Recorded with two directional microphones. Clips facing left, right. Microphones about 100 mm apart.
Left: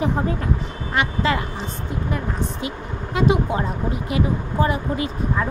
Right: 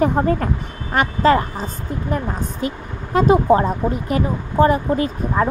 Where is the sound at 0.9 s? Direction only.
40° right (ahead or behind).